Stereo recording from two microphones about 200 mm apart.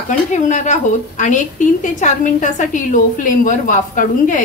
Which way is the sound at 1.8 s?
40° left (ahead or behind).